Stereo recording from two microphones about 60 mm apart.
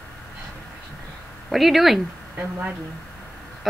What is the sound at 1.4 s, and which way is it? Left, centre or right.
Speech, centre.